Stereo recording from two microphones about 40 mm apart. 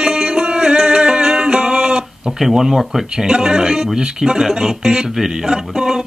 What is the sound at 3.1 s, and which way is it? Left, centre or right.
Speech, centre.